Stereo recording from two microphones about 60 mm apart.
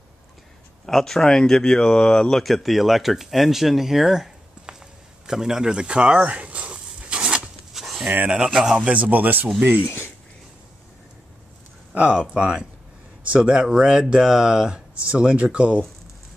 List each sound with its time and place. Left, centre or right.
0.8 s speech: centre
5.2 s a sound: centre
7.7 s a sound: centre
8.3 s a man's voice: centre
9.8 s speech: left
11.9 s speech: centre